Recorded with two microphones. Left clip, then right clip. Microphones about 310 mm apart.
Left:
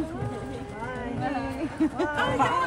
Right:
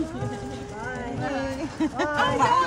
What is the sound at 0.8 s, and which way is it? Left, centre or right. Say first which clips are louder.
Clip-clop: right 1 dB; right.